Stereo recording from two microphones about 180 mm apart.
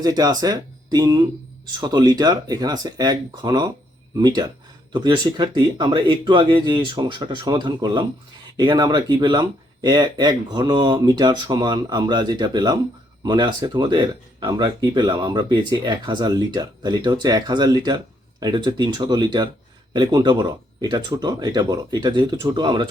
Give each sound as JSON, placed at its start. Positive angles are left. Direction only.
{"t": 0.0, "sound": "speech", "side_deg": -20}